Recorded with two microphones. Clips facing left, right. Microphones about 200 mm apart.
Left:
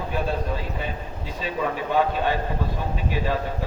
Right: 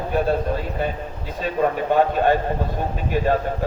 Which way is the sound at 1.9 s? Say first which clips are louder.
Right 4 dB; 50° right (ahead or behind).